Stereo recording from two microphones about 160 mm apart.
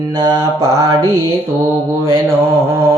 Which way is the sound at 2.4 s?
15° right (ahead or behind).